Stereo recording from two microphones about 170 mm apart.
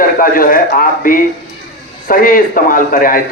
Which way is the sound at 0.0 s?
55° left (ahead or behind).